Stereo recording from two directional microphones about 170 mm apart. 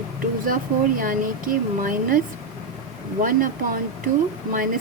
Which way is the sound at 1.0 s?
55° right (ahead or behind).